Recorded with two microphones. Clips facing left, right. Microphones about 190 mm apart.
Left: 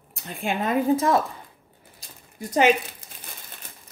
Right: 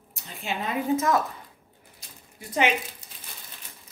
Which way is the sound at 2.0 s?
40° left (ahead or behind).